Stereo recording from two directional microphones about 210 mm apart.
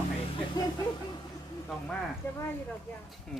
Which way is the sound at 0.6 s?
20° left (ahead or behind).